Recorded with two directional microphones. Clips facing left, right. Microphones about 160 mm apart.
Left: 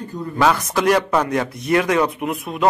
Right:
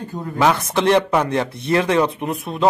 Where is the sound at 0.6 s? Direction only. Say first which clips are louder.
Right 1 dB; 30° right (ahead or behind).